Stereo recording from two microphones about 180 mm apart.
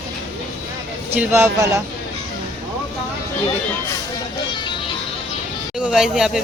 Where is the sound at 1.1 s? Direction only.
10° right (ahead or behind).